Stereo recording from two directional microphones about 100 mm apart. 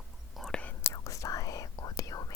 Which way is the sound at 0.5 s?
15° left (ahead or behind).